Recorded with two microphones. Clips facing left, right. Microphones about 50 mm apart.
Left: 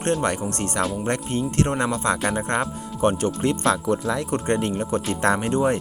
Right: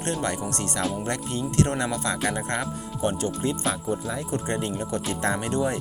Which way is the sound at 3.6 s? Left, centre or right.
Left.